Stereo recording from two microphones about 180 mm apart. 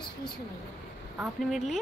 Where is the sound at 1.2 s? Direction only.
Centre (ahead or behind).